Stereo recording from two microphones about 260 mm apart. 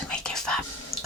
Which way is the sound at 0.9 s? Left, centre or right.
Right.